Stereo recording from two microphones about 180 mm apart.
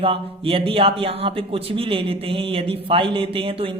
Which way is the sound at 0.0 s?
30° right (ahead or behind).